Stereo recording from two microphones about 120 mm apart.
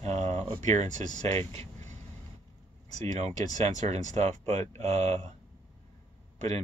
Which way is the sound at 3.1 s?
75° right (ahead or behind).